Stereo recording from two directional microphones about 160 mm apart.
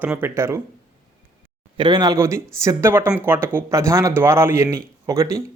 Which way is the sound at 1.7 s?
30° right (ahead or behind).